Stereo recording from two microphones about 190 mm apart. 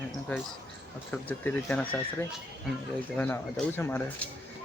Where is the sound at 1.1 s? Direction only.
5° left (ahead or behind).